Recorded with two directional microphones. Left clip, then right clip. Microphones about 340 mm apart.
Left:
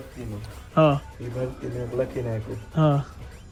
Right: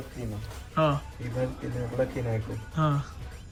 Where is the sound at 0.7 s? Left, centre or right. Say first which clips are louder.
Left 6 dB; centre.